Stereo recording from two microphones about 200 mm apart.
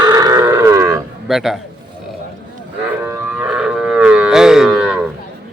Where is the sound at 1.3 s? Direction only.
Centre (ahead or behind).